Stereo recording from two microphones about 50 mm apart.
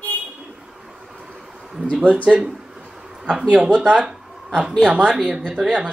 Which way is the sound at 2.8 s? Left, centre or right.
Centre.